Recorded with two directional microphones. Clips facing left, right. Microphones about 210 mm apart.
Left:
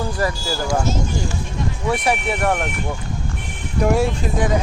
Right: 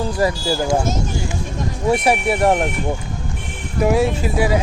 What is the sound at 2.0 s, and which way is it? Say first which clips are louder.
Speech: right 4 dB; 30° right (ahead or behind).